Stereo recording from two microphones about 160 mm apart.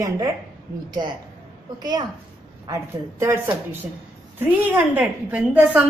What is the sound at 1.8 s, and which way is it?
Speech, 25° right (ahead or behind).